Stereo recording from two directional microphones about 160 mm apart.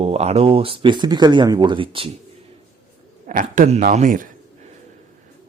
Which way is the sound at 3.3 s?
55° right (ahead or behind).